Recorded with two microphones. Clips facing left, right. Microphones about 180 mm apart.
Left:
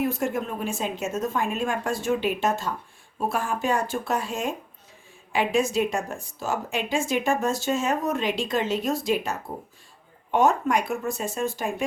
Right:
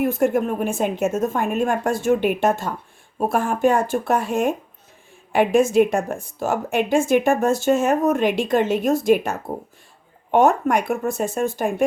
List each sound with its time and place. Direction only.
0.0 s a woman's voice: 55° right (ahead or behind)